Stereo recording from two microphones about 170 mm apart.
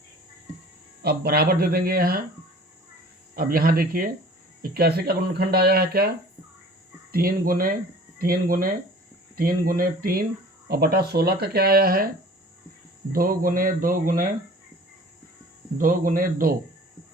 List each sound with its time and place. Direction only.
1.0 s speech: 65° right (ahead or behind)
3.3 s speech: 60° right (ahead or behind)
7.1 s speech: 60° right (ahead or behind)
13.1 s speech: 55° right (ahead or behind)
15.8 s speech: 55° right (ahead or behind)